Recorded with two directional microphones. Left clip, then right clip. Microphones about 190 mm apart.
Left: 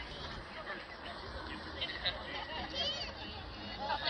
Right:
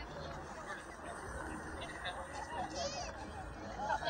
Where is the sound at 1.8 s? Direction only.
30° right (ahead or behind).